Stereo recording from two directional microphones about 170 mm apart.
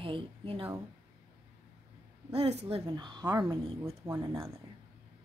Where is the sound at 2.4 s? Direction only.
35° right (ahead or behind); by 4.2 s 20° right (ahead or behind).